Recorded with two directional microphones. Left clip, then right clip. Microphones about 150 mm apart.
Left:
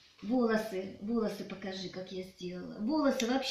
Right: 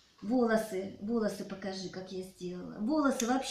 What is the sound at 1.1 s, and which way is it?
Speech, 20° right (ahead or behind).